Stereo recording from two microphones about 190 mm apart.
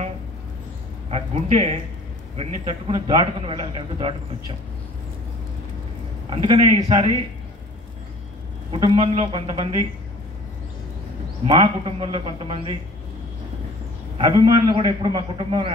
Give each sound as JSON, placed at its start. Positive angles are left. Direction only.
{"t": 1.1, "sound": "a man's voice", "side_deg": -35}
{"t": 6.3, "sound": "a man's voice", "side_deg": -30}
{"t": 8.7, "sound": "a man's voice", "side_deg": -25}
{"t": 11.4, "sound": "a man's voice", "side_deg": -25}
{"t": 14.3, "sound": "a man's voice", "side_deg": -25}